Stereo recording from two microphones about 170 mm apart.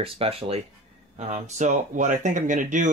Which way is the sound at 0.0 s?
35° right (ahead or behind).